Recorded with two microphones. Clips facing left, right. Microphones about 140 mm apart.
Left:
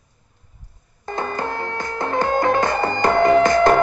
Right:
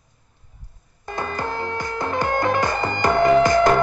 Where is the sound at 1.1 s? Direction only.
20° left (ahead or behind).